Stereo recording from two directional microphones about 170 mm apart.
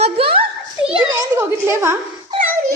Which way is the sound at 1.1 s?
15° right (ahead or behind).